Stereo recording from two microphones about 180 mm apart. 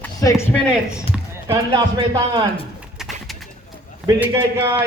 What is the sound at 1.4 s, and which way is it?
Speech, 15° right (ahead or behind).